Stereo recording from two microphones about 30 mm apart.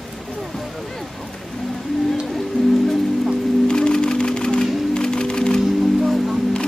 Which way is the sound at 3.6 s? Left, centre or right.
Left.